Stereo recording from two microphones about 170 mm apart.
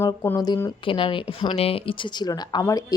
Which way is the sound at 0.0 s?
15° left (ahead or behind).